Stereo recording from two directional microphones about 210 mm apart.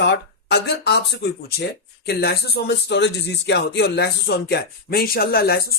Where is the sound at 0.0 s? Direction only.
55° left (ahead or behind).